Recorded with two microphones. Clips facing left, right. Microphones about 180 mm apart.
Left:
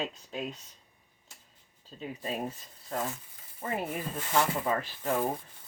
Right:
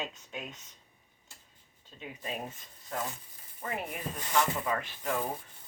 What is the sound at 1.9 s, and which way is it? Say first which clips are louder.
Speech: left 4 dB; 35° left (ahead or behind).